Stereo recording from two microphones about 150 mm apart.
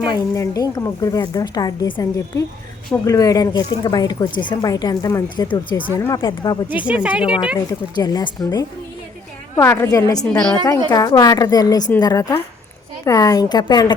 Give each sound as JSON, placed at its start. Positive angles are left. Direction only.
{"t": 0.0, "sound": "speech", "side_deg": 25}
{"t": 5.9, "sound": "speech", "side_deg": 20}
{"t": 6.7, "sound": "speech", "side_deg": -10}
{"t": 7.7, "sound": "speech", "side_deg": 25}